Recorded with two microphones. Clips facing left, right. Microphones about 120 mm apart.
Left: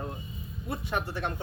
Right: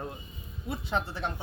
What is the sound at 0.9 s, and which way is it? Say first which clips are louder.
Speech: right 1 dB; 25° right (ahead or behind).